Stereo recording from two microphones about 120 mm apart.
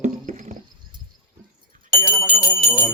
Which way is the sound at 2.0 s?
15° left (ahead or behind).